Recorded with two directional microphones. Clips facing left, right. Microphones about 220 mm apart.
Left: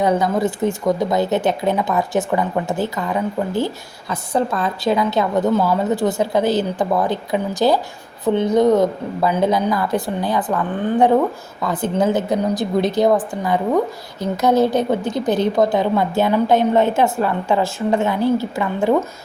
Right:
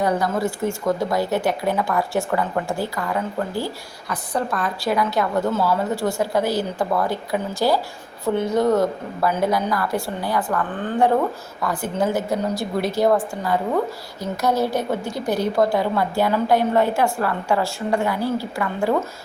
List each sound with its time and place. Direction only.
0.0 s a woman's voice: 20° left (ahead or behind)